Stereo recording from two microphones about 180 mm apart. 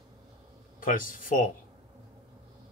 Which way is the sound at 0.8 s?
50° left (ahead or behind).